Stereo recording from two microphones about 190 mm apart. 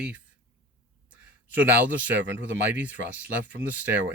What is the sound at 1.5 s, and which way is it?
Speech, 10° right (ahead or behind).